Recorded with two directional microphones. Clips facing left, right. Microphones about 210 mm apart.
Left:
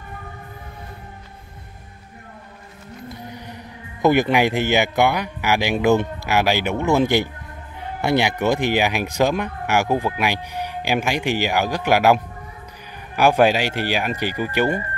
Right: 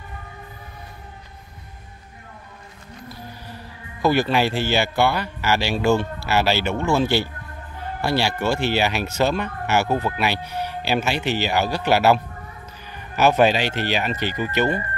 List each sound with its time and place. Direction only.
3.1 s speech: 20° left (ahead or behind)